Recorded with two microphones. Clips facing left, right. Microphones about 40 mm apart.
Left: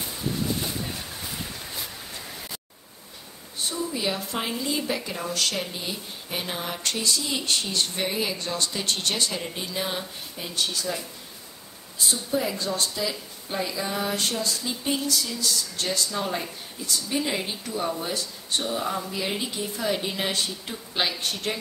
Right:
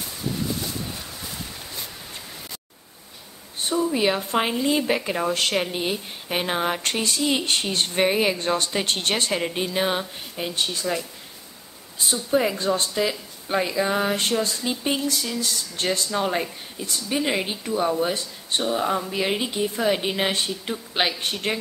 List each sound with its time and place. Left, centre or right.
3.5 s speech: right
12.1 s a woman's voice: right